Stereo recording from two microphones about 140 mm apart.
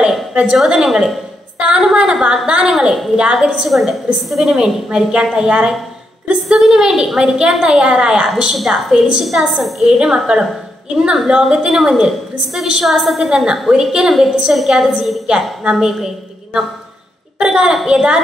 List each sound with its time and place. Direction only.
0.0 s a woman's voice: 5° right (ahead or behind)
17.4 s a woman's voice: 5° right (ahead or behind)